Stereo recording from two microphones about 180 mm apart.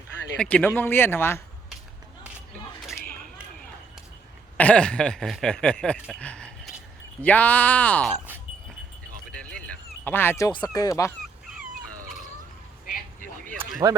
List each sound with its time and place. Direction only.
0.3 s speech: 10° left (ahead or behind)
4.5 s speech: 5° left (ahead or behind)
10.0 s speech: 10° left (ahead or behind)
13.8 s speech: 20° right (ahead or behind)